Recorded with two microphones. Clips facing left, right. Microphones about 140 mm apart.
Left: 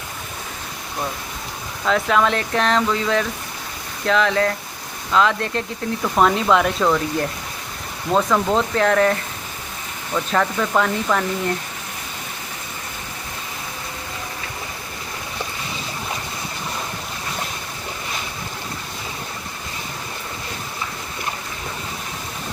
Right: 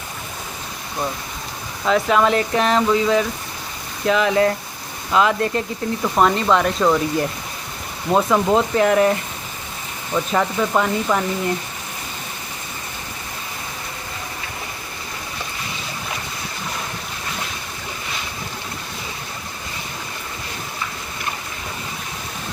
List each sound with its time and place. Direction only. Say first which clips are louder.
1.8 s speech: right 2 dB; 5° right (ahead or behind)
8.1 s speech: right 2 dB; 10° right (ahead or behind)
10.2 s speech: right 1 dB; 10° right (ahead or behind)